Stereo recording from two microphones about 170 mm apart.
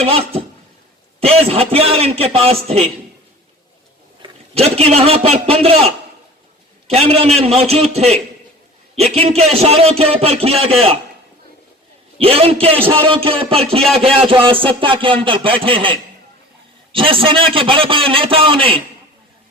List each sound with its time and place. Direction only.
0.0 s a man's voice: 35° right (ahead or behind)
4.2 s a man's voice: 35° right (ahead or behind)
12.1 s a man's voice: 35° right (ahead or behind)